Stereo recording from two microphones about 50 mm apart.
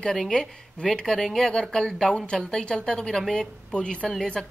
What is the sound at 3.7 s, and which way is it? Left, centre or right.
Speech, left.